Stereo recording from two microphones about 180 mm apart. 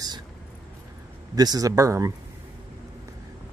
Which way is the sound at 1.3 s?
20° right (ahead or behind).